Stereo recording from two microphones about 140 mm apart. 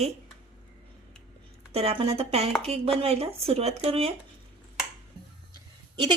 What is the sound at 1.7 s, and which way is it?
A woman's voice, 45° right (ahead or behind).